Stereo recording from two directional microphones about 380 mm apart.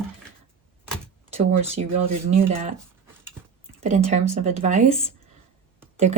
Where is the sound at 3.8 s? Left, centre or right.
Centre.